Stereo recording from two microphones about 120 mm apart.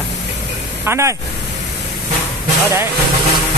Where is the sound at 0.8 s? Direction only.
20° right (ahead or behind).